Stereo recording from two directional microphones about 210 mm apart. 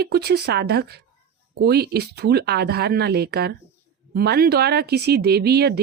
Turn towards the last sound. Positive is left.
turn(degrees=-50)  # may be behind; listen again after turning